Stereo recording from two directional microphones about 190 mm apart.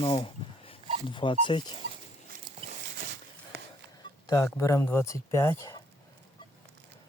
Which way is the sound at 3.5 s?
60° right (ahead or behind).